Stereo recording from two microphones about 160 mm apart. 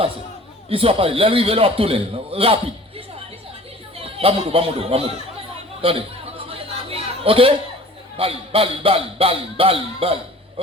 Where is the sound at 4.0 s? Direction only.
35° right (ahead or behind).